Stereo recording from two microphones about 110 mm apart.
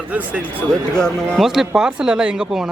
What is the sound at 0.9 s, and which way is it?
Speech, 5° left (ahead or behind).